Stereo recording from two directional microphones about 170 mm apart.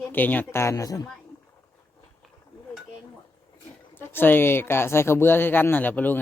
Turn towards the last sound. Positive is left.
turn(degrees=10)  # may be behind; listen again after turning